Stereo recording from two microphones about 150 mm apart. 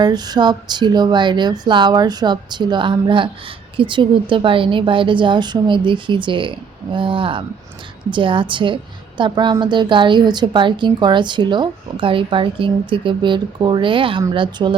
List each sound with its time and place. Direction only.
0.0 s a woman's voice: 30° right (ahead or behind)